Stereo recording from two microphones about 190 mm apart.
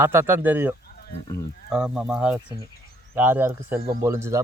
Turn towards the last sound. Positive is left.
turn(degrees=-15)  # may be behind; listen again after turning